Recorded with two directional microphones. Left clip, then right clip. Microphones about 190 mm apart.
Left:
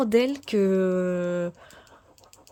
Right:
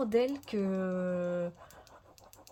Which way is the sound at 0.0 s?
55° left (ahead or behind).